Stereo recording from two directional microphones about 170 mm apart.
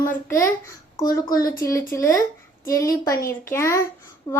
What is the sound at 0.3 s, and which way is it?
A child's voice, 15° left (ahead or behind).